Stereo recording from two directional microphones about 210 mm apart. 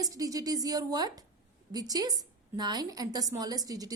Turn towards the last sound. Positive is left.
turn(degrees=-15)  # may be behind; listen again after turning